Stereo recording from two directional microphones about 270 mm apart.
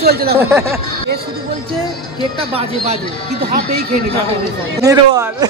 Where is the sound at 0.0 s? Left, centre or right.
Right.